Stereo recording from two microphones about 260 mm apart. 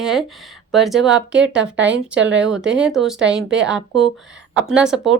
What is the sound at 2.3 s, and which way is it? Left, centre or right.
A woman's voice, centre.